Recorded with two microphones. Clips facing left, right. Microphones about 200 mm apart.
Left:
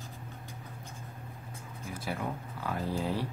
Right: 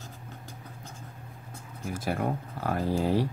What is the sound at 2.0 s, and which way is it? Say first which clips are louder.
Speech: right 6 dB; 50° right (ahead or behind).